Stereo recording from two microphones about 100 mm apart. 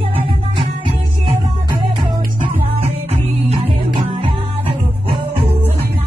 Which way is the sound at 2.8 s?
85° right.